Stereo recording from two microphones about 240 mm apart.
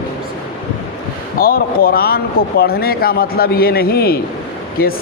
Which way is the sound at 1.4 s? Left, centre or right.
Left.